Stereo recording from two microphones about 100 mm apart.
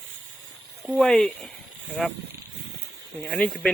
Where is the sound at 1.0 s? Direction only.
5° left (ahead or behind).